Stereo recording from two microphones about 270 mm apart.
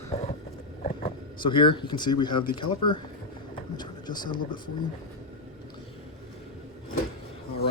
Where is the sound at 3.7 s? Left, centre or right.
Centre.